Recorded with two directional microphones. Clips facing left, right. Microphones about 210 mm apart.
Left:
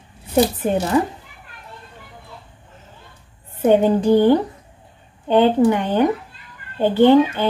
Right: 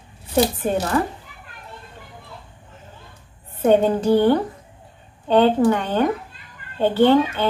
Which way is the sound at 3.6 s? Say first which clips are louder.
Left 2 dB; 15° left (ahead or behind).